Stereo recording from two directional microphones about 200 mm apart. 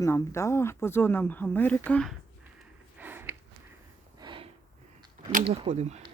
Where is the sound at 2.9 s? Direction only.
10° right (ahead or behind).